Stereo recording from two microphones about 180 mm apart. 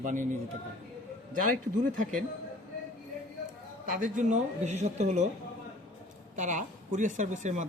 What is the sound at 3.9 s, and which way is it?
A man's voice, 45° right (ahead or behind).